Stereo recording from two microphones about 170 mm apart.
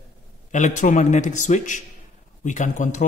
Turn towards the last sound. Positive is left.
turn(degrees=45)  # may be behind; listen again after turning